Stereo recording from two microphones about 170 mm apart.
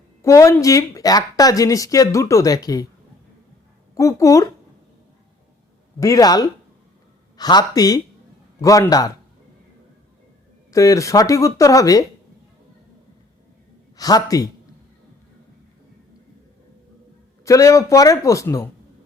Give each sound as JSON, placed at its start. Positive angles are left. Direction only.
{"t": 0.2, "sound": "speech", "side_deg": 15}
{"t": 3.9, "sound": "speech", "side_deg": 20}
{"t": 6.0, "sound": "speech", "side_deg": 20}
{"t": 10.7, "sound": "speech", "side_deg": 20}
{"t": 13.9, "sound": "speech", "side_deg": 20}
{"t": 17.4, "sound": "speech", "side_deg": 20}